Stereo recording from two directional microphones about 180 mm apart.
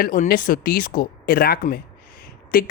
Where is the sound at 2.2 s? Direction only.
55° left (ahead or behind).